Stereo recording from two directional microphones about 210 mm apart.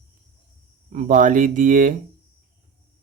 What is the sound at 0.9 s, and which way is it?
Speech, 35° right (ahead or behind).